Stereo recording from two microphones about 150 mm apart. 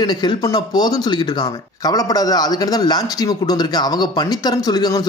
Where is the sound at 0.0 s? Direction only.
30° left (ahead or behind).